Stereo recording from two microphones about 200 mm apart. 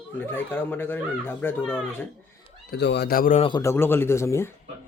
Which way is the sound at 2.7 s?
55° left (ahead or behind).